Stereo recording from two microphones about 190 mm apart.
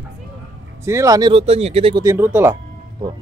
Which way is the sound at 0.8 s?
15° right (ahead or behind).